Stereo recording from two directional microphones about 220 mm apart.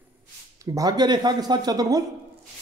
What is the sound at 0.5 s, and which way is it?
Speech, 15° right (ahead or behind).